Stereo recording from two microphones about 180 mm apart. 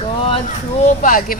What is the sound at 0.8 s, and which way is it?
Speech, 45° left (ahead or behind).